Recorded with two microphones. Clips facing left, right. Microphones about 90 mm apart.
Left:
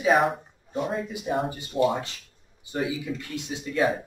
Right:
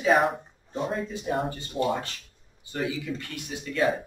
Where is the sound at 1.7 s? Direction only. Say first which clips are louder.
Left 4 dB; 25° left (ahead or behind).